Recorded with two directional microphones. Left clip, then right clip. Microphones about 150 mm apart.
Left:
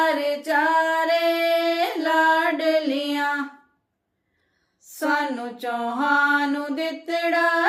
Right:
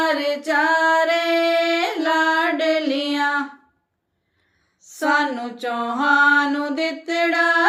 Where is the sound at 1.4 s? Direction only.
25° left (ahead or behind).